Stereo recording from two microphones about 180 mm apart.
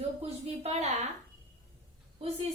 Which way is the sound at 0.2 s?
35° right (ahead or behind).